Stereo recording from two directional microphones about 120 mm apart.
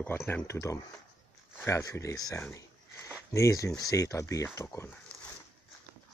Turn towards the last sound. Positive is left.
turn(degrees=10)  # may be behind; listen again after turning